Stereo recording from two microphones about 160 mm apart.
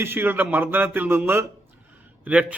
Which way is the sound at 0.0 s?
15° right (ahead or behind).